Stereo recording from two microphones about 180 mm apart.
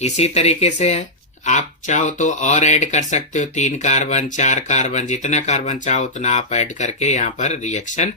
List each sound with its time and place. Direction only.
0.0 s speech: 35° left (ahead or behind)